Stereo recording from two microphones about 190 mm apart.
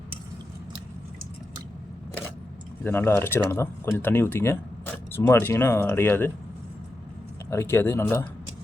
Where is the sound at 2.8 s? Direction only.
10° left (ahead or behind).